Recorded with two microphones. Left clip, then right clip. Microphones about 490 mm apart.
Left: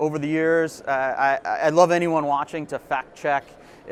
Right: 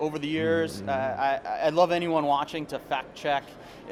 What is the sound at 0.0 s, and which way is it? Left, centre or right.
A man's voice, left.